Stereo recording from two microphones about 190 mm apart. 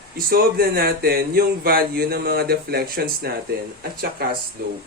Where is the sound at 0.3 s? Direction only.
50° right (ahead or behind).